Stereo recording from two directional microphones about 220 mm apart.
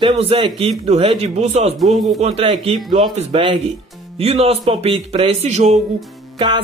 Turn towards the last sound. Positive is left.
turn(degrees=-20)  # may be behind; listen again after turning